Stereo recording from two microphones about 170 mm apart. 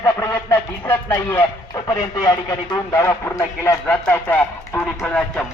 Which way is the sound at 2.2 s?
25° left (ahead or behind).